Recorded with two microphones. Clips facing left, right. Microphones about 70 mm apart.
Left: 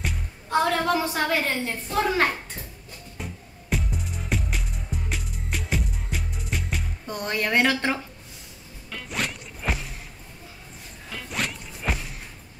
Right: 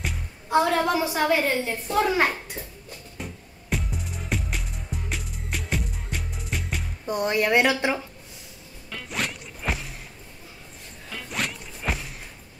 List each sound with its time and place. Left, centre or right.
0.0 s a woman's voice: centre
3.7 s music: centre
7.1 s speech: centre
8.9 s a sound: centre
11.1 s zipper: centre